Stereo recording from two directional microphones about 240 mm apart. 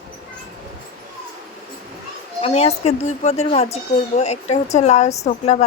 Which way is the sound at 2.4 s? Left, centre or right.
Left.